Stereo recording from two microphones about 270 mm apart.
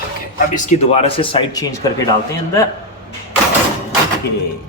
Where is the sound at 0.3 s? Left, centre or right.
Left.